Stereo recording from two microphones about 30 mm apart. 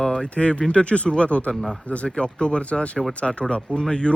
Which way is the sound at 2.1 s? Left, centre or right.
Left.